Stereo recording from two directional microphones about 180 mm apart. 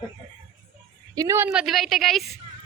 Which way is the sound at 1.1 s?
20° right (ahead or behind).